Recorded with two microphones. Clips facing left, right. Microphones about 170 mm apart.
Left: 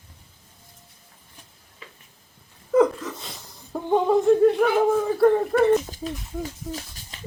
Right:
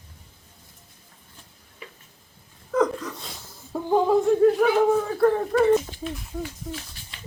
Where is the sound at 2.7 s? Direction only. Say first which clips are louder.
Left 4 dB; 5° left (ahead or behind).